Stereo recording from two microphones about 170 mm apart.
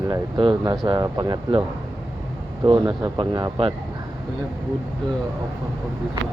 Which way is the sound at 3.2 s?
30° right (ahead or behind).